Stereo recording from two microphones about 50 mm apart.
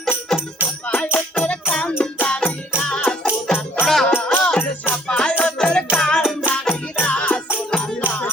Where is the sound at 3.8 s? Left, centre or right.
Centre.